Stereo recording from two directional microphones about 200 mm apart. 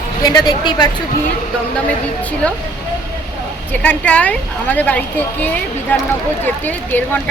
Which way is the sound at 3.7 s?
10° left (ahead or behind).